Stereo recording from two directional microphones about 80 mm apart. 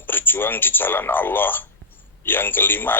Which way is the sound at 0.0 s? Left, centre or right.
Left.